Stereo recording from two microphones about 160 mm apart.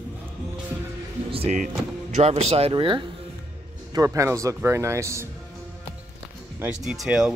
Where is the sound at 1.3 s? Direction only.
40° right (ahead or behind).